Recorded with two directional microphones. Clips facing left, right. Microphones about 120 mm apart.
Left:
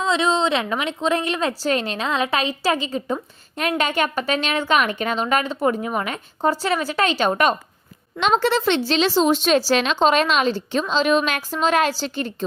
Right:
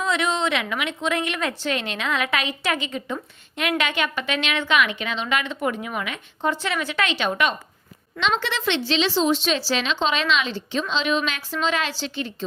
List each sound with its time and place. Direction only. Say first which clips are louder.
0.0 s speech: left 4 dB; 25° left (ahead or behind); by 12.5 s 45° left (ahead or behind)